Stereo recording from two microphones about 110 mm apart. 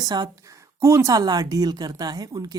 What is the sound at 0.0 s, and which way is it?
Speech, 40° right (ahead or behind).